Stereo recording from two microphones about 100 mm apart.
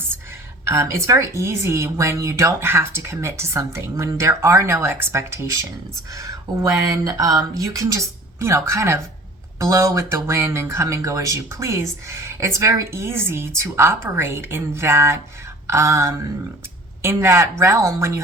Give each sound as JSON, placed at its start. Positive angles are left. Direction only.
{"t": 0.6, "sound": "speech", "side_deg": -30}